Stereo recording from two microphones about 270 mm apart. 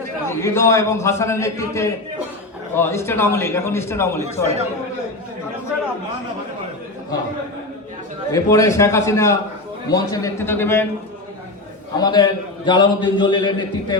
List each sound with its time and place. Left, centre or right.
0.3 s a man's voice: centre
8.3 s a man's voice: centre
11.9 s a man's voice: centre